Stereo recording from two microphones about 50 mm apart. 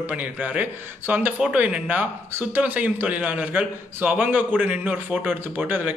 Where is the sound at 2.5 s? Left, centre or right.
Right.